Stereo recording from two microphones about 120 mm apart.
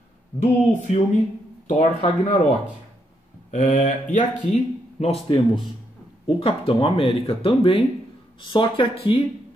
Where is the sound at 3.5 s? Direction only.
90° left; by 5.1 s 65° left (ahead or behind).